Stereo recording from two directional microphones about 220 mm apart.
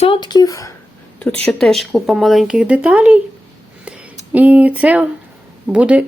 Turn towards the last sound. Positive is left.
turn(degrees=-5)  # may be behind; listen again after turning